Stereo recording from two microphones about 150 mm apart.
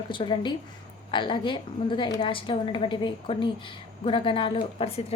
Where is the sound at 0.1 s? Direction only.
30° left (ahead or behind).